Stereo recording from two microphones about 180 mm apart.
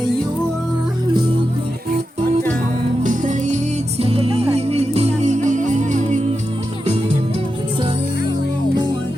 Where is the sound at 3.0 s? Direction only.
45° right (ahead or behind).